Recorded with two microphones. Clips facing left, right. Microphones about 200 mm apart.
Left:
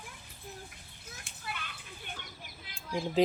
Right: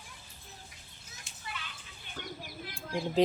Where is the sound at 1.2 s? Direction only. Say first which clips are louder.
Left 2 dB; 55° left (ahead or behind).